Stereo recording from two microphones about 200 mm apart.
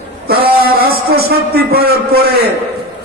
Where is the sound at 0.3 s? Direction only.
50° right (ahead or behind).